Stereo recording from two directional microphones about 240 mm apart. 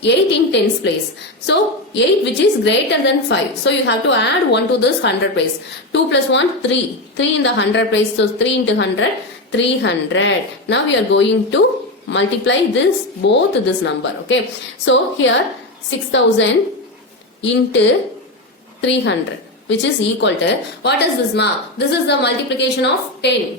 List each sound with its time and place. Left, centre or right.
0.0 s a woman's voice: left